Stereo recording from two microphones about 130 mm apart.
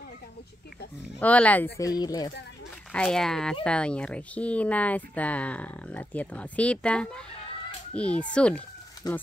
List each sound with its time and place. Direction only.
1.2 s speech: 10° left (ahead or behind)
1.8 s speech: 30° left (ahead or behind)
2.9 s speech: 5° left (ahead or behind)
9.0 s speech: 30° left (ahead or behind)